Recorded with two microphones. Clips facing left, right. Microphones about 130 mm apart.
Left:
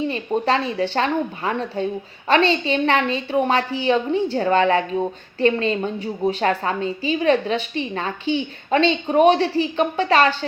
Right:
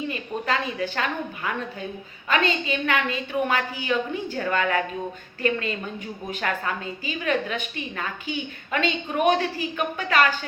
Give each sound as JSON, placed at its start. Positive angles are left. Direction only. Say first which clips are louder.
{"t": 0.1, "sound": "a woman's voice", "louder": "left 6 dB", "side_deg": 30}